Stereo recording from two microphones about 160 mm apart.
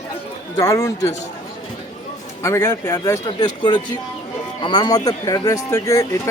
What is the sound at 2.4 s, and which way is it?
A man's voice, 15° left (ahead or behind).